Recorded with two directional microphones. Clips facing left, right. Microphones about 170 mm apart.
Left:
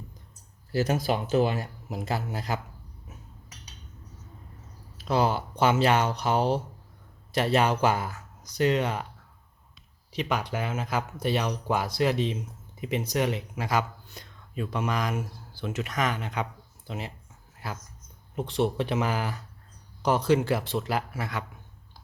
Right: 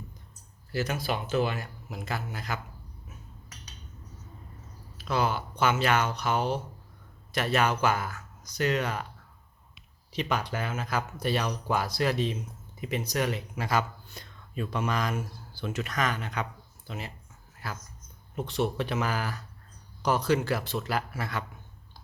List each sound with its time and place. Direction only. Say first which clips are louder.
0.7 s speech: left 5 dB; 40° left (ahead or behind)
4.9 s speech: left 3 dB; 35° left (ahead or behind)
10.1 s speech: left 1 dB; 15° left (ahead or behind)